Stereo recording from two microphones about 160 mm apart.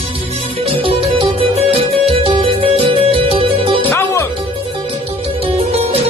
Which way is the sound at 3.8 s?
15° left (ahead or behind).